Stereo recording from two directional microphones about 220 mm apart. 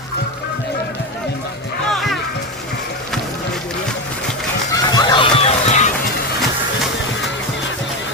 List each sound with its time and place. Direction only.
1.9 s music: centre (ahead or behind)
4.7 s run: 20° left (ahead or behind)